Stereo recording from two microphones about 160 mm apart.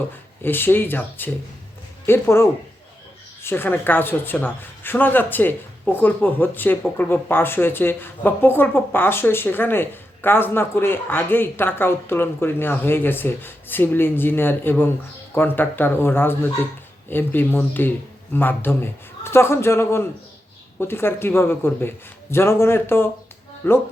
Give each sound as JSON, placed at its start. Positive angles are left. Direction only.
{"t": 0.4, "sound": "speech", "side_deg": 15}